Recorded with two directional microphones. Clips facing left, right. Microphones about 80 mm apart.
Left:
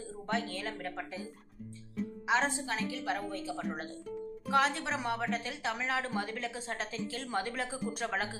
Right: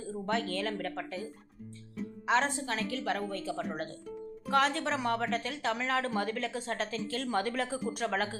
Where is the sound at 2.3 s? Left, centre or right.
Centre.